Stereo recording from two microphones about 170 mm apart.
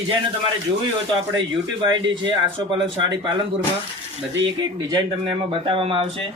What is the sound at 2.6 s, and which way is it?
Speech, 25° right (ahead or behind).